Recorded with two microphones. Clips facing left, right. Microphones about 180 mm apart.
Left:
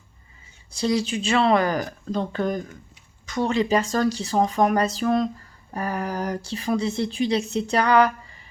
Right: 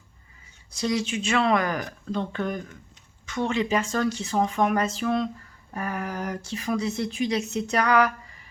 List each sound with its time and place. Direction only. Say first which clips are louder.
0.7 s speech: left 3 dB; 30° left (ahead or behind)